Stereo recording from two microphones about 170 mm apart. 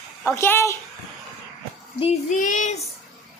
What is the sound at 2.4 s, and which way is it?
Child singing, 45° left (ahead or behind).